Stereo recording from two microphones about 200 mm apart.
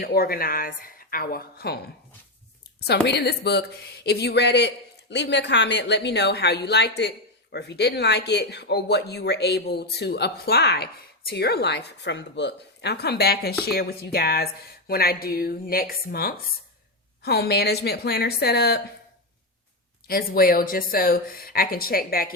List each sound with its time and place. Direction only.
0.0 s speech: 50° left (ahead or behind)
20.1 s speech: 45° left (ahead or behind)